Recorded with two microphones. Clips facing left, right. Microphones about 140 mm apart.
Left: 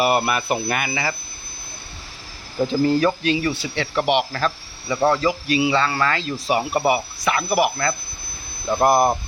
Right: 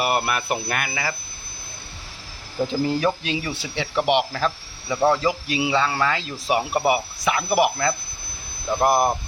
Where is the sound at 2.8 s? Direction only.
10° right (ahead or behind).